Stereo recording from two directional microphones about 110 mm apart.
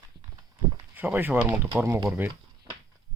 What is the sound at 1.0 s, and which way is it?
A child's voice, 15° right (ahead or behind).